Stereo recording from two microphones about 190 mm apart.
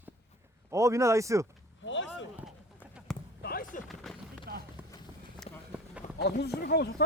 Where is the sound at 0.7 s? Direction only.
15° right (ahead or behind).